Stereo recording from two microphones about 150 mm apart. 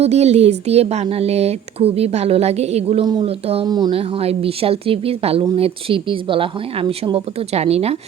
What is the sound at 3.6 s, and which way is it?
Speech, 30° right (ahead or behind).